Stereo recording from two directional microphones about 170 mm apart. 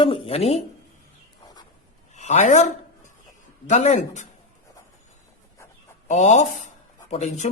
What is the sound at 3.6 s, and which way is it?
Speech, 45° left (ahead or behind).